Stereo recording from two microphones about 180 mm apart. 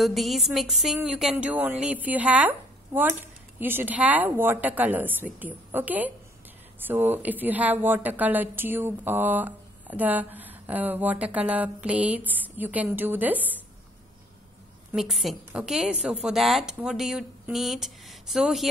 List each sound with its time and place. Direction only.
0.0 s speech: centre (ahead or behind)
14.9 s a woman's voice: centre (ahead or behind)